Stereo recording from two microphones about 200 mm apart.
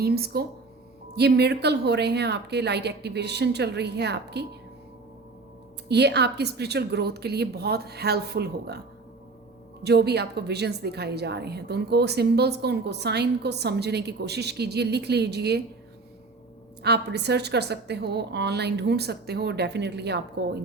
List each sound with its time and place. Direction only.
0.0 s a woman's voice: 50° right (ahead or behind)
5.9 s a woman's voice: 55° right (ahead or behind)
9.8 s a woman's voice: 55° right (ahead or behind)
16.8 s a woman's voice: 55° right (ahead or behind)